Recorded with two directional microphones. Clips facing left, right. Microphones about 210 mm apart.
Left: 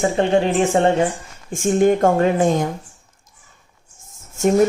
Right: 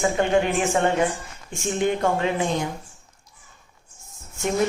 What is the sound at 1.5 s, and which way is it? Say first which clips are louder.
Speech: left 8 dB; 45° left (ahead or behind).